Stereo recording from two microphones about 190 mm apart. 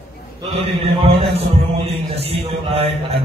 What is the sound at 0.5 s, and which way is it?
A man's voice, 30° right (ahead or behind).